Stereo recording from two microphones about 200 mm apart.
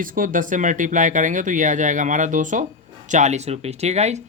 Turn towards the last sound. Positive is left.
turn(degrees=-35)  # may be behind; listen again after turning